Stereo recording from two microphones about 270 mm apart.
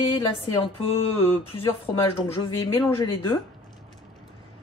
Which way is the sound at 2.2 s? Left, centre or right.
Centre.